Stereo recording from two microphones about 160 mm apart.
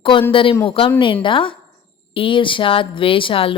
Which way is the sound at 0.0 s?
35° left (ahead or behind).